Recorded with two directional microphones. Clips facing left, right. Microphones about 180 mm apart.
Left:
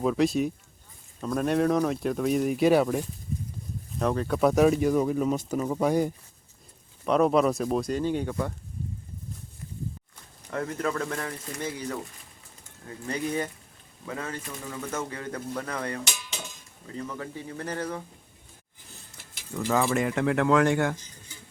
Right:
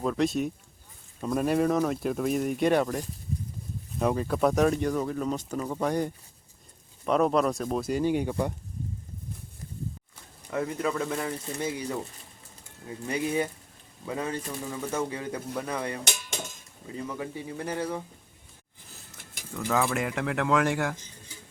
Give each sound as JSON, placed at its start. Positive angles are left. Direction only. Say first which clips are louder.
{"t": 0.0, "sound": "speech", "louder": "left 2 dB", "side_deg": 0}
{"t": 3.9, "sound": "speech", "louder": "even", "side_deg": -5}
{"t": 7.9, "sound": "speech", "louder": "right 1 dB", "side_deg": -10}
{"t": 10.5, "sound": "speech", "louder": "right 1 dB", "side_deg": -5}
{"t": 16.0, "sound": "a sound", "louder": "right 3 dB", "side_deg": -50}
{"t": 16.8, "sound": "speech", "louder": "right 1 dB", "side_deg": -15}
{"t": 19.5, "sound": "speech", "louder": "left 2 dB", "side_deg": 0}